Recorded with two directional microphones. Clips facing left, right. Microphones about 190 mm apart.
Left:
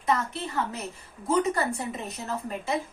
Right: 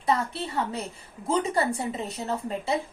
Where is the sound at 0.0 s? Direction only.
30° right (ahead or behind).